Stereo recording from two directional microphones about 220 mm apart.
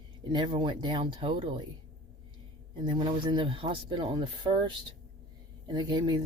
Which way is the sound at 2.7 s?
20° right (ahead or behind).